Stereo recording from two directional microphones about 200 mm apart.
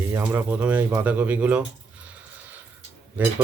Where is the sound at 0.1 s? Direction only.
10° right (ahead or behind).